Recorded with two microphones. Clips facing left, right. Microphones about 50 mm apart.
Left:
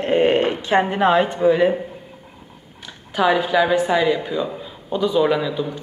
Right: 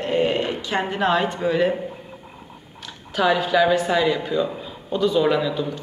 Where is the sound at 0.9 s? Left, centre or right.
Centre.